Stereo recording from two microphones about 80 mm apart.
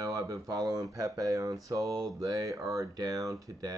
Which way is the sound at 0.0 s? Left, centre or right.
Right.